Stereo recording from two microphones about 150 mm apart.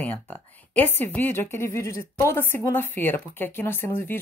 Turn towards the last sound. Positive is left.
turn(degrees=15)  # may be behind; listen again after turning